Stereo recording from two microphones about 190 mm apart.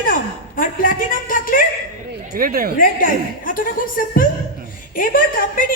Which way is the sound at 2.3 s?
50° right (ahead or behind).